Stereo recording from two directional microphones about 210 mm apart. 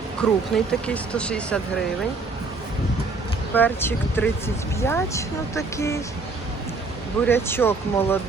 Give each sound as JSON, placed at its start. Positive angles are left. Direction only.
{"t": 0.2, "sound": "speech", "side_deg": 5}
{"t": 3.5, "sound": "speech", "side_deg": 10}
{"t": 7.3, "sound": "speech", "side_deg": 10}